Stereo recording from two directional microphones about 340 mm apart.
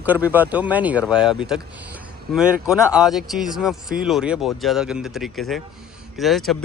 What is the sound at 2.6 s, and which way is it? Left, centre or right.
Speech, centre.